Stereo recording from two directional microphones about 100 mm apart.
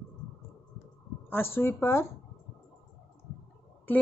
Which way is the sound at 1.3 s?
25° left (ahead or behind).